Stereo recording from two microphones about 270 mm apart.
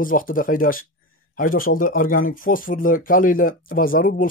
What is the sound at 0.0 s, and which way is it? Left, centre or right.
Speech, left.